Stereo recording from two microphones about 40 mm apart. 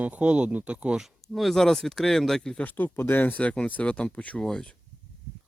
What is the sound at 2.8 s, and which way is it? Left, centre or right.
Speech, left.